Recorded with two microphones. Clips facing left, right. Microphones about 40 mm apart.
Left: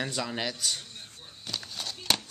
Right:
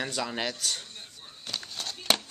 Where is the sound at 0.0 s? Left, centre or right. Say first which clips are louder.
Right 1 dB; centre.